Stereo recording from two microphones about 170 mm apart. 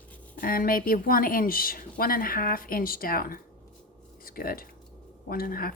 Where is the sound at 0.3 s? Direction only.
55° left (ahead or behind).